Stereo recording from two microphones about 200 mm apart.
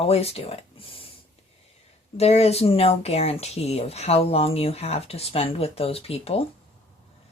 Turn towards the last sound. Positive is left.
turn(degrees=30)  # may be behind; listen again after turning